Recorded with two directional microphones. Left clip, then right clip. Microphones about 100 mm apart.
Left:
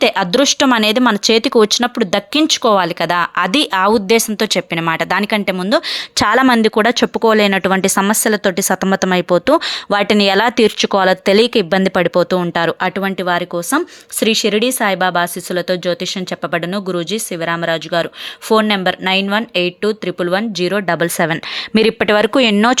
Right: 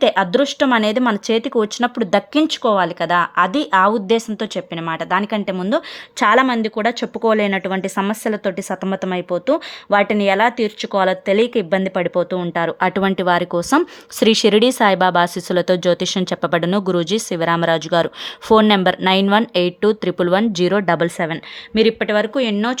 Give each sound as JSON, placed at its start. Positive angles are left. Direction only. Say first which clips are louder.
{"t": 0.0, "sound": "speech", "louder": "left 2 dB", "side_deg": 30}
{"t": 2.0, "sound": "speech", "louder": "left 1 dB", "side_deg": 10}
{"t": 2.3, "sound": "speech", "louder": "left 4 dB", "side_deg": 30}
{"t": 5.2, "sound": "speech", "louder": "left 5 dB", "side_deg": 20}
{"t": 6.1, "sound": "speech", "louder": "left 2 dB", "side_deg": 45}
{"t": 9.1, "sound": "speech", "louder": "left 5 dB", "side_deg": 45}
{"t": 13.0, "sound": "speech", "louder": "even", "side_deg": -10}
{"t": 21.8, "sound": "speech", "louder": "left 3 dB", "side_deg": 65}